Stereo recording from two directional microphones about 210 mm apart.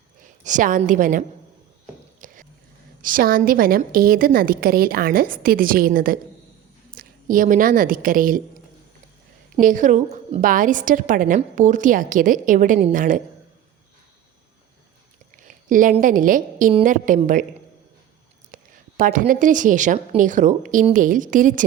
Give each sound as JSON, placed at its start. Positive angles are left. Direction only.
{"t": 0.2, "sound": "a woman's voice", "side_deg": -40}
{"t": 2.2, "sound": "a sound", "side_deg": -40}
{"t": 3.0, "sound": "a woman's voice", "side_deg": -40}
{"t": 15.4, "sound": "a woman's voice", "side_deg": -40}
{"t": 18.5, "sound": "a woman's voice", "side_deg": -40}